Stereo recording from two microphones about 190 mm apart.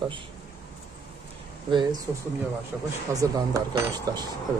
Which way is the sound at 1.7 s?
25° right (ahead or behind).